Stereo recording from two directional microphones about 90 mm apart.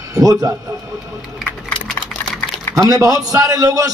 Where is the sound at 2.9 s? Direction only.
40° right (ahead or behind).